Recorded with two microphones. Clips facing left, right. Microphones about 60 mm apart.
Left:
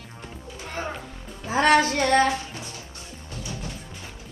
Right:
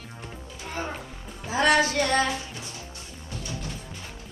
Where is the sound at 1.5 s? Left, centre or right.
Left.